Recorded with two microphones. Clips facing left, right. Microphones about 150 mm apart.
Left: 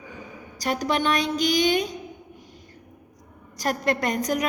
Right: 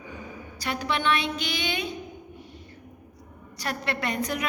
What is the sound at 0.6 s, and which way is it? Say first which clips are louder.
A woman's voice: left 4 dB; 40° left (ahead or behind).